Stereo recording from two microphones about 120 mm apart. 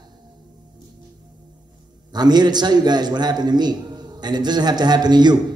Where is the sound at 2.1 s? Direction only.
35° right (ahead or behind).